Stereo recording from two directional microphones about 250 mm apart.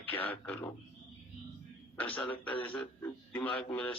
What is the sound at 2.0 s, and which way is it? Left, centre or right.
Speech, centre.